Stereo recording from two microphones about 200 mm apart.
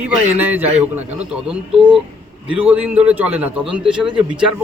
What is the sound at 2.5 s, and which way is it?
A man's voice, 5° right (ahead or behind).